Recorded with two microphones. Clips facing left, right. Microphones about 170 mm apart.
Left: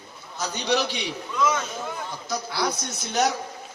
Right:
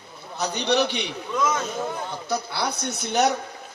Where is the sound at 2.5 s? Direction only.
65° right (ahead or behind).